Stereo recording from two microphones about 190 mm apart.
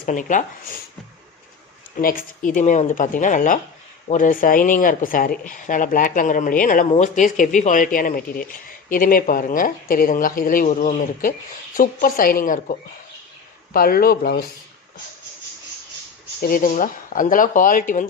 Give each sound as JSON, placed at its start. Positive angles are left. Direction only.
{"t": 0.0, "sound": "speech", "side_deg": 45}
{"t": 2.0, "sound": "speech", "side_deg": 50}
{"t": 13.7, "sound": "speech", "side_deg": 50}
{"t": 16.4, "sound": "speech", "side_deg": 50}